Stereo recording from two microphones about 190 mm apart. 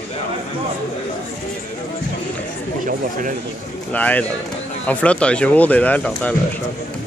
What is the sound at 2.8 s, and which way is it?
Speech, 45° right (ahead or behind).